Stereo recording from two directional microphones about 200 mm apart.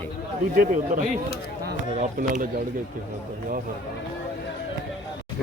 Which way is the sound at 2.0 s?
40° right (ahead or behind).